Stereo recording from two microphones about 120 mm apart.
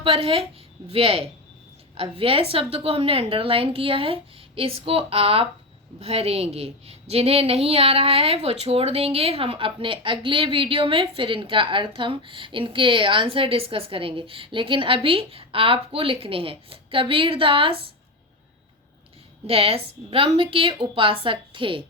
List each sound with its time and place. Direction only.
0.0 s a woman's voice: 50° right (ahead or behind)
19.5 s a woman's voice: 50° right (ahead or behind)